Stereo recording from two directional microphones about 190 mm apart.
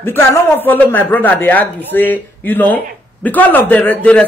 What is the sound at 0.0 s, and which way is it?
Speech, 10° left (ahead or behind).